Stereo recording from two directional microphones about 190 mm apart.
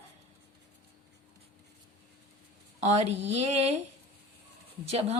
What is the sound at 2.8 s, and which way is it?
Speech, 35° right (ahead or behind).